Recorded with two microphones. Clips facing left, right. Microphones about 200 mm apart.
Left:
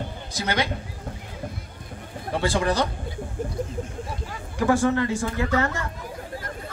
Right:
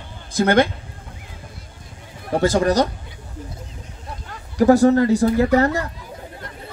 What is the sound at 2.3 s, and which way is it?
Speech, 40° right (ahead or behind).